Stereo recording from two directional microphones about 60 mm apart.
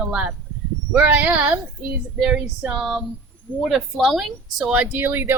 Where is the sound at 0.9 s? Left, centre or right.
Right.